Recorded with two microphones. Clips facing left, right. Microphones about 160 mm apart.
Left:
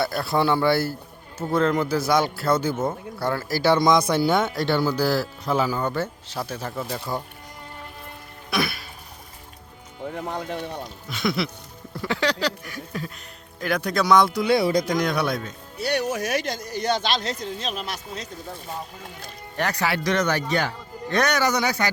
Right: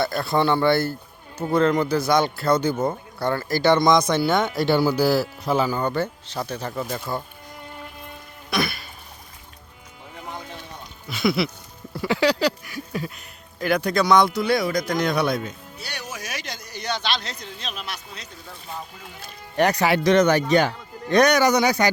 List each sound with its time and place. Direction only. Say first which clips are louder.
0.0 s a man's voice: right 1 dB; 5° left (ahead or behind)
8.4 s music: right 1 dB; 5° left (ahead or behind)
10.2 s music: left 6 dB; 65° left (ahead or behind)
11.1 s a man's voice: right 3 dB; 5° right (ahead or behind)
14.3 s speech: left 2 dB; 20° left (ahead or behind)
14.8 s a man's voice: right 1 dB; 15° left (ahead or behind)
15.8 s speech: left 12 dB; 60° left (ahead or behind); by 18.3 s 45° left (ahead or behind)
19.5 s speech: right 6 dB; 20° right (ahead or behind)